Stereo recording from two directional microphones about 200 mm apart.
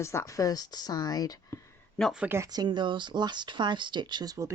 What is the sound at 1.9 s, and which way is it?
Speech, centre (ahead or behind).